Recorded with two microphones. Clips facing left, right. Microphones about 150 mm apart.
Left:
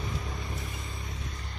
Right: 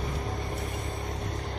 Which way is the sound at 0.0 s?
50° right (ahead or behind).